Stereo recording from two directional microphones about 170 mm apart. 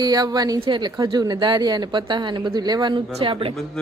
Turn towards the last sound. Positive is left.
turn(degrees=-30)  # may be behind; listen again after turning